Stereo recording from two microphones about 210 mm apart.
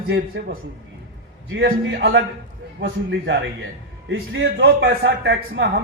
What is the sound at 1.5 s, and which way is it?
A man's voice, 65° right (ahead or behind).